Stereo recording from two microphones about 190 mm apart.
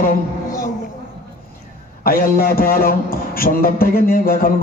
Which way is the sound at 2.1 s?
50° left (ahead or behind).